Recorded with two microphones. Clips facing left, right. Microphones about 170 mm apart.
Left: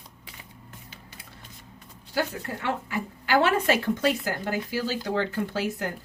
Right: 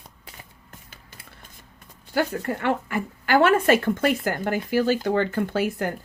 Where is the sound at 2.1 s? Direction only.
55° right (ahead or behind).